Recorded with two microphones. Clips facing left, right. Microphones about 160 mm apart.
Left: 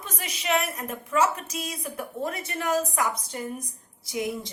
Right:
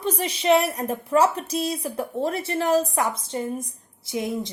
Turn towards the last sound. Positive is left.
turn(degrees=-25)  # may be behind; listen again after turning